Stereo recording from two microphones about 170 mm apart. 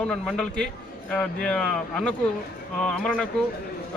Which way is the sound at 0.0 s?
5° left (ahead or behind).